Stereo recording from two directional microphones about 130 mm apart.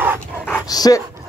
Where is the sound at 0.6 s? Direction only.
30° left (ahead or behind).